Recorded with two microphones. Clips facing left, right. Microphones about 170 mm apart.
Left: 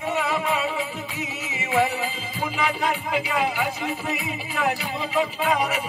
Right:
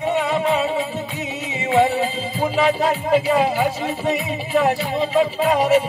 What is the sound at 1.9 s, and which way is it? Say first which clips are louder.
Music: right 7 dB; 30° right (ahead or behind).